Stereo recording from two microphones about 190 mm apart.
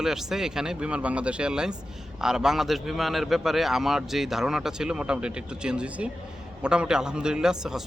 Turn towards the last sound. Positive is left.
turn(degrees=-5)  # may be behind; listen again after turning